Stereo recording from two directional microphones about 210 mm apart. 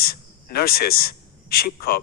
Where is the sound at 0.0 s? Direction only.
45° left (ahead or behind).